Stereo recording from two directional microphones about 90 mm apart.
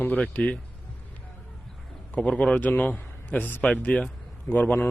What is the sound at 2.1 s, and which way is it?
A man's voice, 10° left (ahead or behind).